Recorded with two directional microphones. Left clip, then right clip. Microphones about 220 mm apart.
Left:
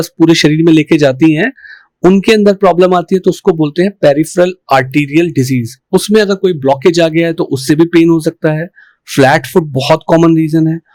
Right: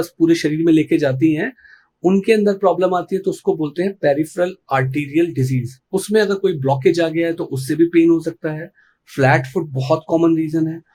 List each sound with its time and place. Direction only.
0.0 s speech: 40° left (ahead or behind)